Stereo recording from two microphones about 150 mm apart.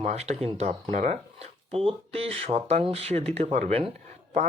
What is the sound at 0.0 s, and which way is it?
Speech, 45° right (ahead or behind).